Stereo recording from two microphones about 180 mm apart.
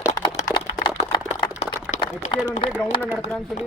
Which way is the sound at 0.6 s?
35° left (ahead or behind).